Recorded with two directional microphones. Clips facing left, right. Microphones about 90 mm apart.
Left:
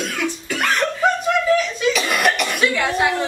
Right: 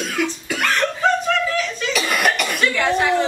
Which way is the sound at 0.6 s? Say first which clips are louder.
Left 1 dB; 15° left (ahead or behind).